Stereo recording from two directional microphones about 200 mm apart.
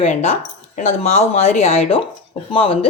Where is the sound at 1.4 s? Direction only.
35° left (ahead or behind).